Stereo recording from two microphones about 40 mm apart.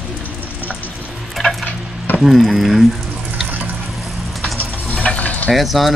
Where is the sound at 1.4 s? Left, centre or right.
Centre.